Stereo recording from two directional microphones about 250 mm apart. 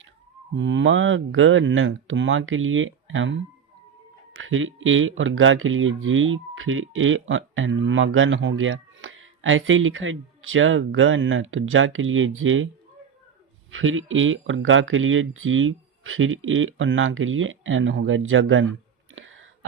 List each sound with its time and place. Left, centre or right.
0.5 s speech: right
4.4 s speech: right
13.7 s speech: right
19.1 s a sound: right